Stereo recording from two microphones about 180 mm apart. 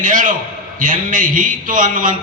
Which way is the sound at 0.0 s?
45° right (ahead or behind).